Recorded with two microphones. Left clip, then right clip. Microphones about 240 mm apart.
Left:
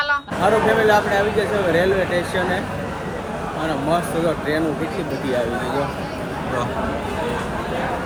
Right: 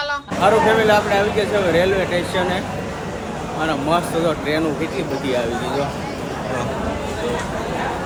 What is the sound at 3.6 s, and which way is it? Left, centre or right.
A woman's voice, centre.